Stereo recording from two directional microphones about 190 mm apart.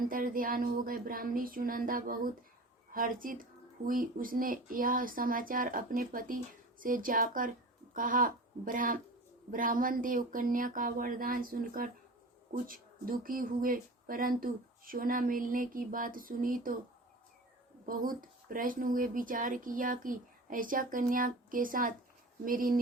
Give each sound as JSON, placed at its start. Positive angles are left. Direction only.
{"t": 0.0, "sound": "speech", "side_deg": -45}
{"t": 17.8, "sound": "speech", "side_deg": -45}